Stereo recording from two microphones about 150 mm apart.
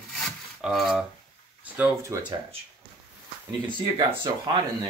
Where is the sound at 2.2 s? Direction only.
35° right (ahead or behind).